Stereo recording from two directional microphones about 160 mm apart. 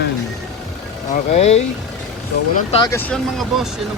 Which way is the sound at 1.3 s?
45° left (ahead or behind).